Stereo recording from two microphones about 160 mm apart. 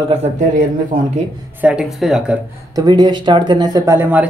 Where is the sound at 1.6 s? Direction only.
5° right (ahead or behind).